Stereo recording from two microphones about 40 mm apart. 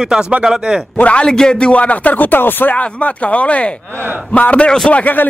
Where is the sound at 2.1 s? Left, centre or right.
Left.